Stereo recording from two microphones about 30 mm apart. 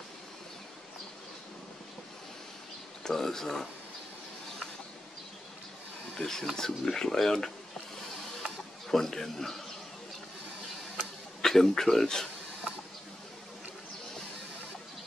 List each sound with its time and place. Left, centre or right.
3.0 s speech: centre
6.1 s speech: centre
8.4 s mechanisms: centre
11.4 s speech: centre